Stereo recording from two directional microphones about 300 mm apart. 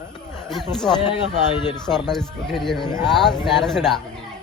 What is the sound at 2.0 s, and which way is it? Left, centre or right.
Speech, centre.